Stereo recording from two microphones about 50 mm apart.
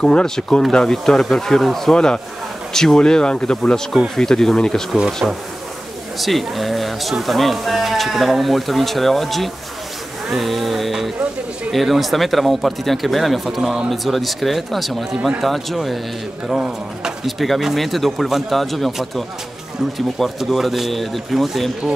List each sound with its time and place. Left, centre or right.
0.0 s speech: centre
4.9 s speech: centre
6.1 s speech: centre
16.5 s speech: centre
17.4 s speech: centre
20.4 s speech: centre